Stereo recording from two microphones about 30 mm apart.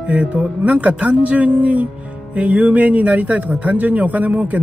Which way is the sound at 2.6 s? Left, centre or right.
Right.